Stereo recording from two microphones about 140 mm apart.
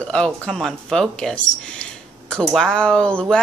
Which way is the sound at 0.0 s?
5° left (ahead or behind).